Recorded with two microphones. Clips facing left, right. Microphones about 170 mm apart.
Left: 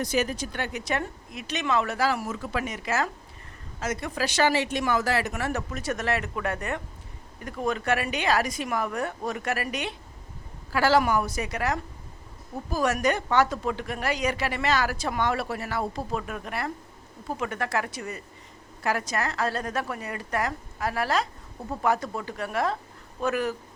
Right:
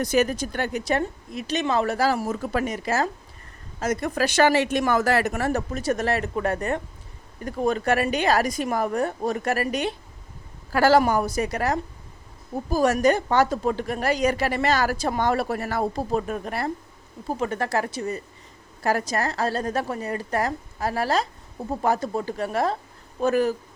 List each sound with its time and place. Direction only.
0.0 s a woman's voice: 45° right (ahead or behind); by 23.6 s 30° right (ahead or behind)